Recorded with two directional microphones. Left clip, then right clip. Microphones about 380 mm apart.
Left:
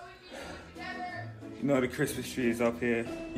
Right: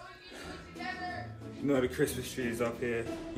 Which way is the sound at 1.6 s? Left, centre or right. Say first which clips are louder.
Left 1 dB; centre.